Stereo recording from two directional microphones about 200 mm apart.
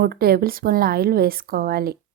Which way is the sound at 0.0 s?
50° right (ahead or behind).